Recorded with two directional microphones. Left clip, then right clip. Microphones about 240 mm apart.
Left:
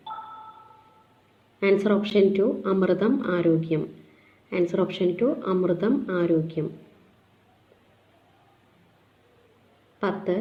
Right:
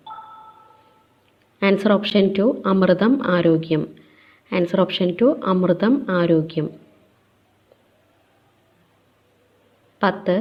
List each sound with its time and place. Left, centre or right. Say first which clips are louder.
0.0 s a sound: even; centre
1.8 s a woman's voice: right 3 dB; right
10.0 s a woman's voice: right 7 dB; right